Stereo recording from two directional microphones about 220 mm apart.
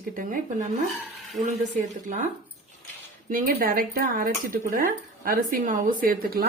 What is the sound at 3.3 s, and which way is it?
A woman's voice, 40° right (ahead or behind).